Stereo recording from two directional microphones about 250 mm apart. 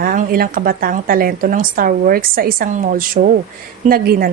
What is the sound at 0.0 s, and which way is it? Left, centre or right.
Speech, right.